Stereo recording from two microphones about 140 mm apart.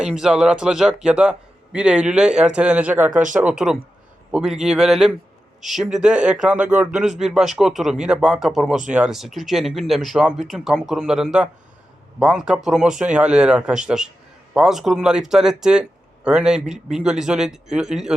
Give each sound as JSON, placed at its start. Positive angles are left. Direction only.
{"t": 0.0, "sound": "a man's voice", "side_deg": -5}
{"t": 3.1, "sound": "speech", "side_deg": -65}
{"t": 3.3, "sound": "a man's voice", "side_deg": -10}